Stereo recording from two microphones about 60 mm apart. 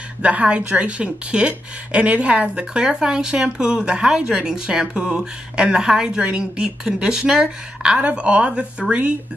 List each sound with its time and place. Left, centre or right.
0.2 s speech: right